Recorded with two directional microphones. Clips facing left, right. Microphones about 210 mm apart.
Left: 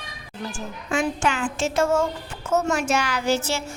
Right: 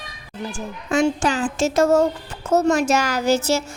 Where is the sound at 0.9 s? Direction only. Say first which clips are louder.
Right 5 dB; 40° right (ahead or behind).